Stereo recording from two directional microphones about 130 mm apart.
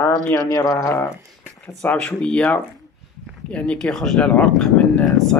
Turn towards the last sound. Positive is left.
turn(degrees=5)  # may be behind; listen again after turning